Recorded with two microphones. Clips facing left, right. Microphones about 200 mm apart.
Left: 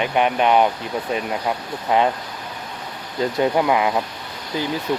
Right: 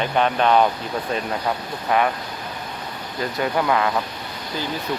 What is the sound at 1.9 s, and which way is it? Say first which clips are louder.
Speech: left 2 dB; 20° left (ahead or behind).